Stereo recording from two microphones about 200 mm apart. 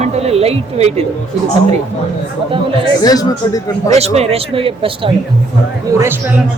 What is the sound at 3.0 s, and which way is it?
Speech, 20° left (ahead or behind).